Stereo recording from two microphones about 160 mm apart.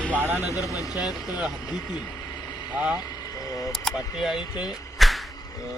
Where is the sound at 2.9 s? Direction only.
25° left (ahead or behind).